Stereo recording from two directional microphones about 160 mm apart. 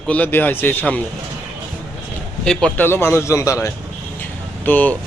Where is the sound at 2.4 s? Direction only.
5° left (ahead or behind).